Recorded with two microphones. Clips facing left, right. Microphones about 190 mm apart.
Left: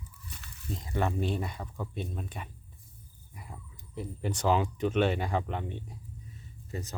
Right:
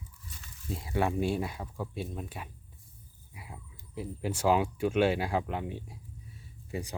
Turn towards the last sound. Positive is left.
turn(degrees=-15)  # may be behind; listen again after turning